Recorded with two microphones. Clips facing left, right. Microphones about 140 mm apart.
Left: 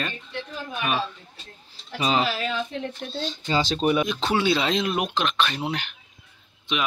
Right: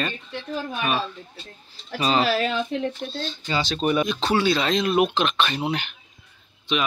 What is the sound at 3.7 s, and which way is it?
Speech, 15° left (ahead or behind).